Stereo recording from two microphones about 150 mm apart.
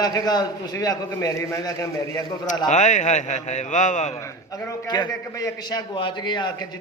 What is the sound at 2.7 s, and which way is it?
A man's voice, 55° left (ahead or behind).